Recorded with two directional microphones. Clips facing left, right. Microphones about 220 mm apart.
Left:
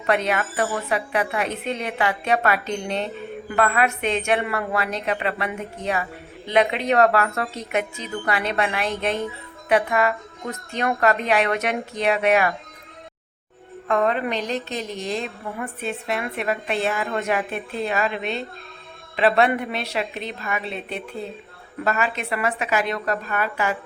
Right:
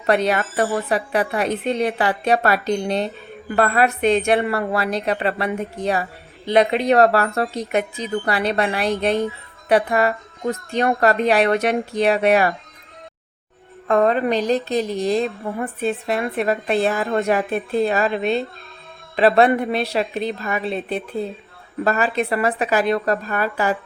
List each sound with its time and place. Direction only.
0.0 s a woman's voice: 35° right (ahead or behind)
13.8 s a woman's voice: 35° right (ahead or behind)